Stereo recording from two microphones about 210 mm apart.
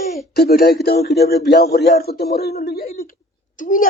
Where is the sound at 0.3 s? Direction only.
45° left (ahead or behind).